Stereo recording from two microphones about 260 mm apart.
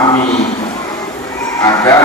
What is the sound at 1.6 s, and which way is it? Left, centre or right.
Speech, centre.